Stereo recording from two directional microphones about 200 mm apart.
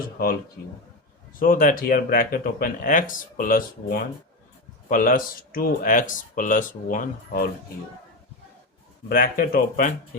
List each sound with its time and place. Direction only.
1.4 s speech: 45° left (ahead or behind)
9.0 s speech: 45° left (ahead or behind)